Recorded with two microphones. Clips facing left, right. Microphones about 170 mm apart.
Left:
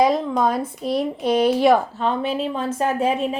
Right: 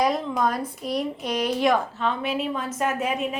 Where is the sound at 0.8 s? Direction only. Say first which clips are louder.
Left 6 dB; 35° left (ahead or behind).